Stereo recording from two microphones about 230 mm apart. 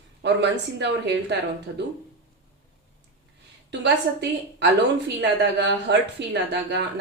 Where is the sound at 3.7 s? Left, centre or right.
Right.